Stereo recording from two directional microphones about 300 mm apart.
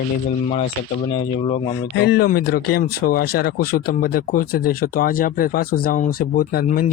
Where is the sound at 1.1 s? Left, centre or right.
Centre.